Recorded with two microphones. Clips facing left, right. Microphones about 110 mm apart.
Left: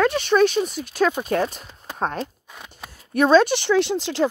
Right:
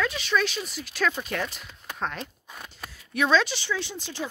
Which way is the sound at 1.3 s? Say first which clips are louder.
Left 9 dB; 35° left (ahead or behind).